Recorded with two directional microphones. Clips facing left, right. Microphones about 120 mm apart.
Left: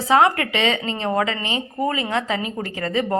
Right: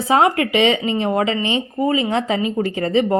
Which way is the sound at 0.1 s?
25° right (ahead or behind).